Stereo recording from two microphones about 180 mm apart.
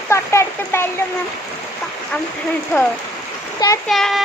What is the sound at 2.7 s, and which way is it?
Speech, 15° left (ahead or behind).